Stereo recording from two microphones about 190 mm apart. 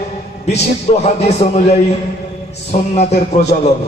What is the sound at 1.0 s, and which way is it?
Speech, 35° left (ahead or behind).